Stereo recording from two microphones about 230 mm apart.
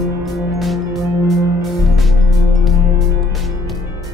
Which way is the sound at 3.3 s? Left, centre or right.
Centre.